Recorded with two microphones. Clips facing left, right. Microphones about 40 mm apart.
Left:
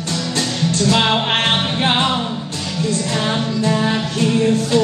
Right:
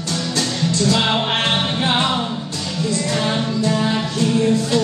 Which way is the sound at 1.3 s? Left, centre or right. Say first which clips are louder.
Left 2 dB; left.